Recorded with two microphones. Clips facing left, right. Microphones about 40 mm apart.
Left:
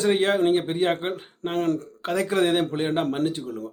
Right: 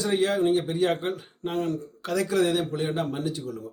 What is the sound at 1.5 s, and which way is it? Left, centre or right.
Speech, left.